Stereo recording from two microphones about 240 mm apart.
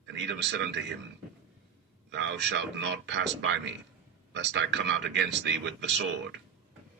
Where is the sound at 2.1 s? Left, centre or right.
Right.